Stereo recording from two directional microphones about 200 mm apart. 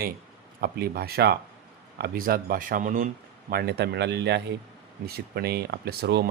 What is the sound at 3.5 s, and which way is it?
A man's voice, 55° right (ahead or behind).